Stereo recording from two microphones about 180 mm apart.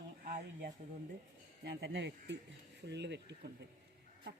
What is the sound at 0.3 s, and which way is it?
Speech, 55° right (ahead or behind).